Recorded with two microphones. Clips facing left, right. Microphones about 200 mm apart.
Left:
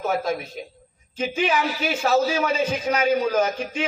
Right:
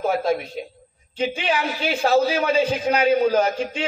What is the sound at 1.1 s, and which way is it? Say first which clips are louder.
A man's voice: even; 30° right (ahead or behind).